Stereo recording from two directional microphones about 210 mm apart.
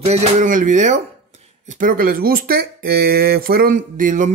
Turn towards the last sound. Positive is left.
turn(degrees=-35)  # may be behind; listen again after turning